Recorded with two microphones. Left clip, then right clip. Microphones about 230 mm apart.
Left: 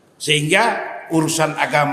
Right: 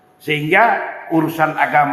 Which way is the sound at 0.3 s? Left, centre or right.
Left.